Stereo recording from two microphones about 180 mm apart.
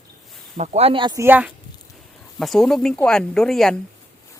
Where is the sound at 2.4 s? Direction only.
Centre (ahead or behind).